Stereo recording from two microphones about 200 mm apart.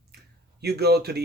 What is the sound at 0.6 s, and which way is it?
Speech, 55° right (ahead or behind).